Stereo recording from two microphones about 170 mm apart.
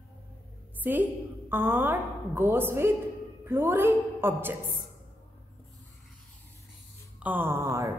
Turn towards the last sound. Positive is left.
turn(degrees=-15)  # may be behind; listen again after turning